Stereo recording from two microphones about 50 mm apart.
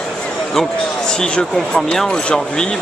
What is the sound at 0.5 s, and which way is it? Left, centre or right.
Speech, centre.